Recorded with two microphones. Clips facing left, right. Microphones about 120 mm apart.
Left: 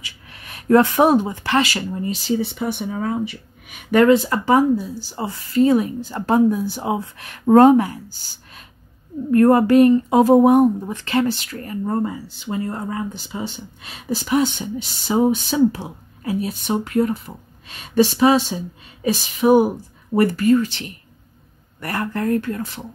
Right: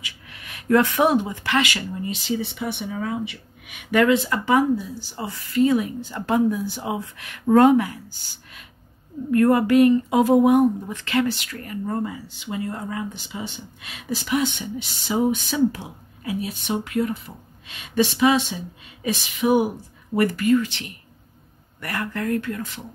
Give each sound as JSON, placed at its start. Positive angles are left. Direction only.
{"t": 0.0, "sound": "speech", "side_deg": 35}
{"t": 9.3, "sound": "speech", "side_deg": 35}